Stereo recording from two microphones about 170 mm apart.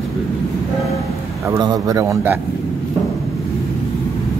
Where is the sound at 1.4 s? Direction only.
20° right (ahead or behind).